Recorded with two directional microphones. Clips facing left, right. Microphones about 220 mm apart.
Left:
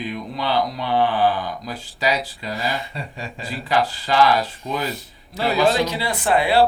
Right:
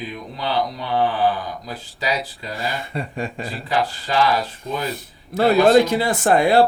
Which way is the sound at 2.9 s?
55° right (ahead or behind).